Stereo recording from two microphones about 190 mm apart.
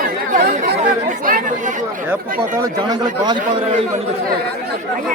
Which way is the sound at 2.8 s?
20° right (ahead or behind).